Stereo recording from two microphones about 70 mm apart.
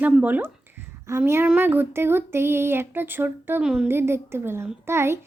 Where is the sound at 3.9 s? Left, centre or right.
Right.